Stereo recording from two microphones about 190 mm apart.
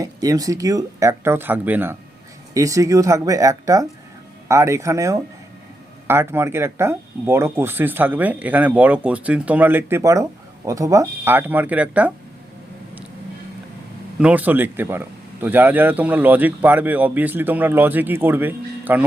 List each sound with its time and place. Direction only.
0.0 s speech: 20° right (ahead or behind)
14.2 s speech: 5° right (ahead or behind)